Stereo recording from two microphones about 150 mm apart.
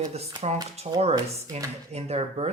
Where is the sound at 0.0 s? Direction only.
45° right (ahead or behind).